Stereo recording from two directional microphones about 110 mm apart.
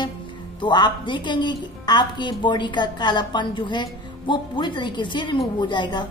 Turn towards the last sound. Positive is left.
turn(degrees=45)  # may be behind; listen again after turning